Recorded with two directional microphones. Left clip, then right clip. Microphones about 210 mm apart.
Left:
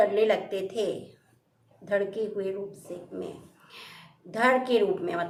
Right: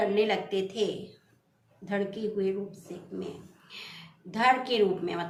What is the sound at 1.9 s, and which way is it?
Speech, 5° left (ahead or behind).